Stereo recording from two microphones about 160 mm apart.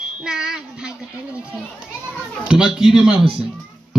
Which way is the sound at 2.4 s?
5° right (ahead or behind).